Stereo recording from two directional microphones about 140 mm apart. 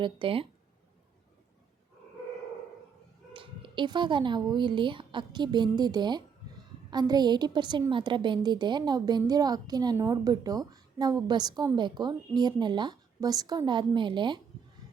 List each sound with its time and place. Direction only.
0.0 s a woman's voice: 40° right (ahead or behind)
3.3 s a woman's voice: 35° right (ahead or behind)